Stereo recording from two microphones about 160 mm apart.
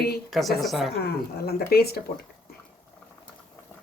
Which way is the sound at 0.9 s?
85° left.